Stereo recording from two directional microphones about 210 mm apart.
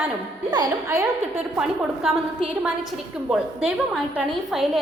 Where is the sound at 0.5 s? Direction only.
15° right (ahead or behind).